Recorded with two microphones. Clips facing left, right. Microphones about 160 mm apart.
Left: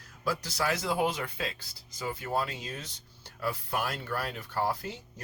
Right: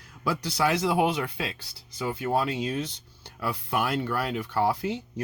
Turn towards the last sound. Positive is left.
turn(degrees=-70)  # may be behind; listen again after turning